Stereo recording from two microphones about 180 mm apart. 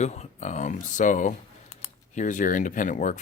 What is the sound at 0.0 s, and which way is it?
Speech, 40° left (ahead or behind).